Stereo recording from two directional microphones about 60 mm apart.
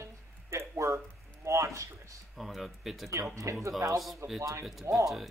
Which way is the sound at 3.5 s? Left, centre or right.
Right.